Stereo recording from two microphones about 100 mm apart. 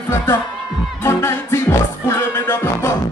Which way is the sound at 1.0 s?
25° left (ahead or behind).